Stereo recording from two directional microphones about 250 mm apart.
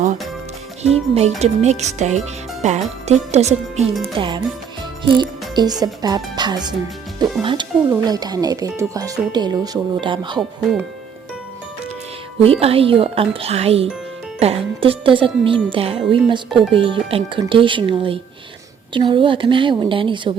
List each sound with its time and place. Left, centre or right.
0.8 s speech: right
12.4 s speech: right